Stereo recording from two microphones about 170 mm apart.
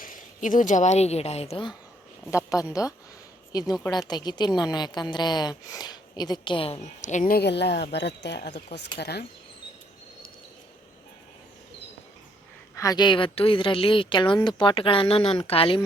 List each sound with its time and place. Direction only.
0.0 s speech: 50° left (ahead or behind); by 1.7 s 35° left (ahead or behind)
2.3 s a woman's voice: 20° left (ahead or behind); by 8.5 s 90° left
9.0 s speech: 70° left (ahead or behind)
12.7 s a woman's voice: 20° left (ahead or behind)